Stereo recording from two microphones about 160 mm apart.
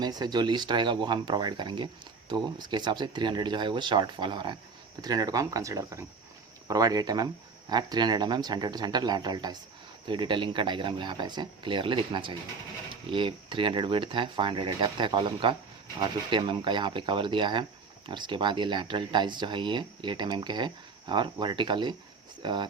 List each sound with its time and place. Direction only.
0.0 s speech: 25° right (ahead or behind)